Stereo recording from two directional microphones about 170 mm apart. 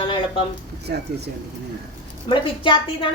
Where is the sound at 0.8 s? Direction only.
70° right (ahead or behind).